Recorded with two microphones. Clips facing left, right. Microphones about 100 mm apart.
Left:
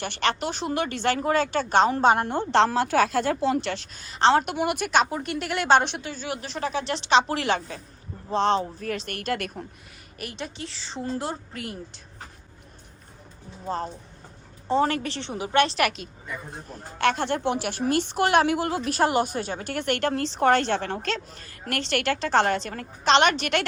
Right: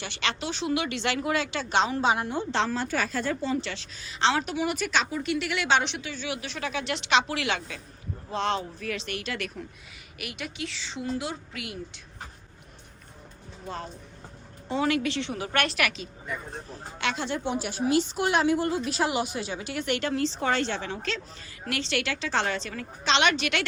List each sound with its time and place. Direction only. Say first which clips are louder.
0.0 s a woman's voice: left 5 dB; 50° left (ahead or behind)
4.4 s a woman's voice: left 2 dB; 55° left (ahead or behind)
10.2 s a woman's voice: left 1 dB; 35° left (ahead or behind)
13.7 s a woman's voice: left 7 dB; 35° left (ahead or behind)
15.8 s a woman's voice: left 4 dB; 45° left (ahead or behind)
17.5 s speech: left 3 dB; 75° left (ahead or behind)
17.8 s a woman's voice: left 1 dB; 55° left (ahead or behind); by 18.9 s 80° left
18.9 s a woman's voice: left 5 dB; 50° left (ahead or behind)